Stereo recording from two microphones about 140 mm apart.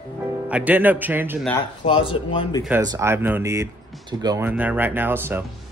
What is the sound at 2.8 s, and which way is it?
Speech, 20° right (ahead or behind).